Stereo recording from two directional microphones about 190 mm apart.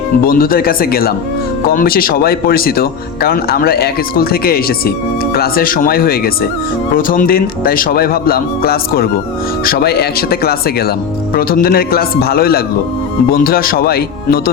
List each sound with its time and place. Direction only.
0.3 s speech: 50° left (ahead or behind)